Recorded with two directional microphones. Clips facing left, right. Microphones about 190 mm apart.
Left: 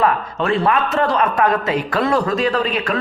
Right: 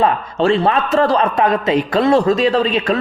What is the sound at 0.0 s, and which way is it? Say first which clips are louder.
A man's voice: right 3 dB; 30° right (ahead or behind).